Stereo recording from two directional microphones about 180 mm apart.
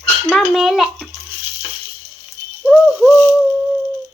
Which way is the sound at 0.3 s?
Centre (ahead or behind).